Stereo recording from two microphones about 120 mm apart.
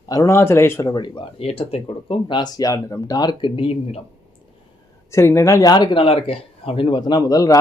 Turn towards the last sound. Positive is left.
turn(degrees=30)  # may be behind; listen again after turning